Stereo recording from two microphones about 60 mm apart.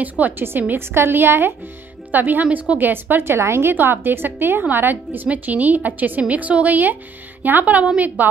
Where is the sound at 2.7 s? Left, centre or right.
Right.